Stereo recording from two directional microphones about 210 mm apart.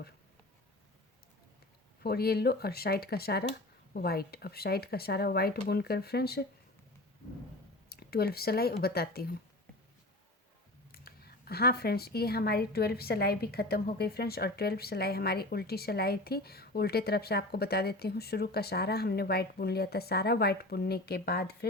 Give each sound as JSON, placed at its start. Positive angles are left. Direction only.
{"t": 2.0, "sound": "speech", "side_deg": 50}
{"t": 7.9, "sound": "speech", "side_deg": 50}
{"t": 10.9, "sound": "speech", "side_deg": 45}